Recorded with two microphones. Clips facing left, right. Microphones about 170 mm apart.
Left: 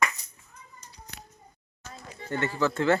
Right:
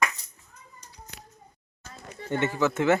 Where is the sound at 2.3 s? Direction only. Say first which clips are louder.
Right 2 dB; 20° right (ahead or behind).